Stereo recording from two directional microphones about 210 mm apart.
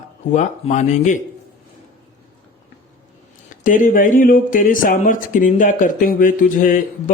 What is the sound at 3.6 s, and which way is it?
Speech, 40° left (ahead or behind).